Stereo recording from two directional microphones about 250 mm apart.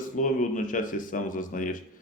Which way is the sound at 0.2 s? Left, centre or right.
Left.